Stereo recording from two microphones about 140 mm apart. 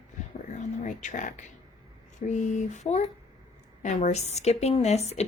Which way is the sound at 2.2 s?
60° left (ahead or behind).